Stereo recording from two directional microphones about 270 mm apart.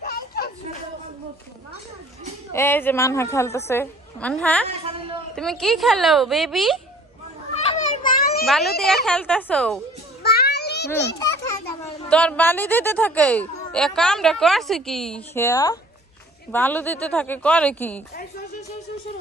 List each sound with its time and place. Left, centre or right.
0.0 s a sound: left
2.5 s a woman's voice: centre
4.6 s a sound: right
5.3 s speech: centre
7.6 s children playing: left
8.5 s speech: centre
10.2 s child singing: left
12.1 s speech: centre